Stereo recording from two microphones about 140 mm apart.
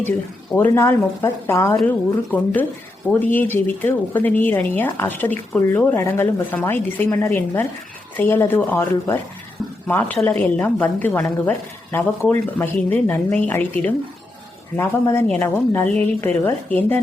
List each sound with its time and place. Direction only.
0.5 s a woman's voice: 20° left (ahead or behind)